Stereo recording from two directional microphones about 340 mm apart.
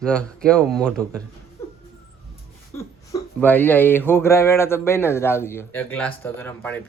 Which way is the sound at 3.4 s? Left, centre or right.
Centre.